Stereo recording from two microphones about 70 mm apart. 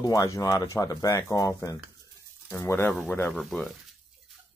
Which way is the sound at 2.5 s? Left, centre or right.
Left.